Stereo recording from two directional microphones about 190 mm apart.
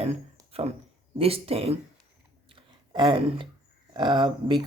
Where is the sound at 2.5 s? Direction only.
25° right (ahead or behind).